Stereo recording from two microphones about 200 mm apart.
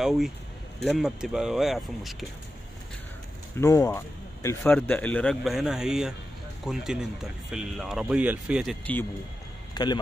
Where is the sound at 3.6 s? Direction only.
15° left (ahead or behind).